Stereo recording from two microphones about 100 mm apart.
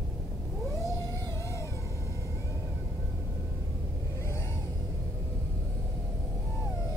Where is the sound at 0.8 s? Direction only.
30° left (ahead or behind).